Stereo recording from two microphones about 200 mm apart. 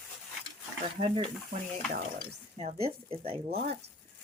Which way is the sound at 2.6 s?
30° right (ahead or behind).